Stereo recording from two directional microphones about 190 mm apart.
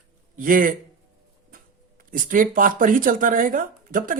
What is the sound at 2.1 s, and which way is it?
Speech, 45° right (ahead or behind).